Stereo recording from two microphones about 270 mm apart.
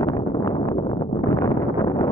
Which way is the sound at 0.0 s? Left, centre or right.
Centre.